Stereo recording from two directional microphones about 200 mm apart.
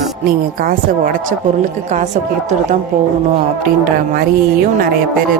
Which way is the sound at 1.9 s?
35° right (ahead or behind).